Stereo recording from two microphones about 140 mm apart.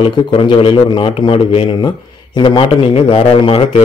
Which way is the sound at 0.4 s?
40° left (ahead or behind).